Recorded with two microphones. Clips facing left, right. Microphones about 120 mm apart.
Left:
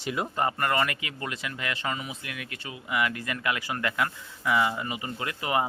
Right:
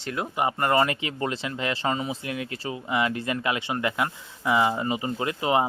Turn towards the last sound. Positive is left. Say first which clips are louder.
# right 4 dB
turn(degrees=-25)  # may be behind; listen again after turning